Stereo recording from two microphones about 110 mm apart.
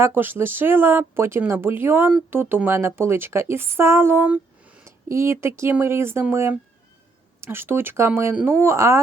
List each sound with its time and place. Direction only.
0.0 s speech: 20° right (ahead or behind)